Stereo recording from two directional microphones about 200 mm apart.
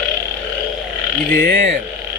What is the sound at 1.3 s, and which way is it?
Speech, 45° right (ahead or behind).